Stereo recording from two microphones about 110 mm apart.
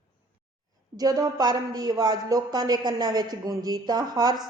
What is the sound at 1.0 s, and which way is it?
Speech, 35° right (ahead or behind).